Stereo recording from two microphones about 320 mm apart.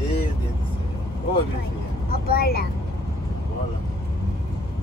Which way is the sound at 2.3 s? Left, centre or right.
Left.